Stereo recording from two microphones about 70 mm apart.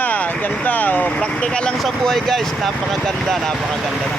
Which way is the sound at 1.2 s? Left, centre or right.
Centre.